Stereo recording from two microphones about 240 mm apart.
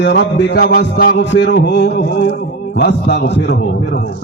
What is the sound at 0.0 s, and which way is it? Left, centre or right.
A man's voice, left.